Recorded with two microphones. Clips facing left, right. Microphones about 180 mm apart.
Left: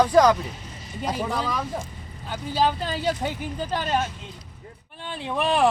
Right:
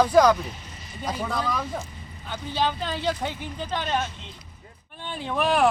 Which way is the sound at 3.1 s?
10° left (ahead or behind).